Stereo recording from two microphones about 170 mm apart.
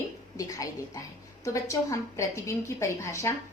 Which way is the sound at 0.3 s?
20° left (ahead or behind).